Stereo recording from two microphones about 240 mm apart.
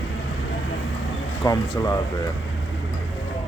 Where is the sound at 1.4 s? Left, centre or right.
Centre.